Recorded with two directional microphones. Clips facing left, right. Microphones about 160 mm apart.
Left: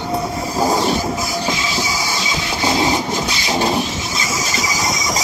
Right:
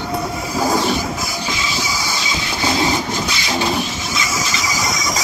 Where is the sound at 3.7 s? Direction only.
40° left (ahead or behind).